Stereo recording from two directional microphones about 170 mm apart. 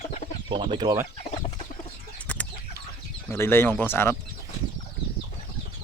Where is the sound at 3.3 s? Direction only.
15° left (ahead or behind).